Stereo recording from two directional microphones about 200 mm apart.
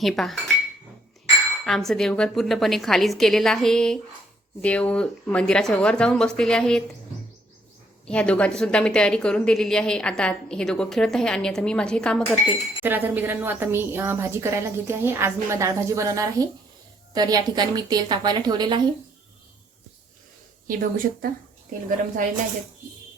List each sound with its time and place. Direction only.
0.0 s speech: centre (ahead or behind)
1.6 s a woman's voice: centre (ahead or behind)
8.0 s a woman's voice: 5° left (ahead or behind)
12.8 s a woman's voice: 10° right (ahead or behind)
20.7 s a woman's voice: 45° right (ahead or behind)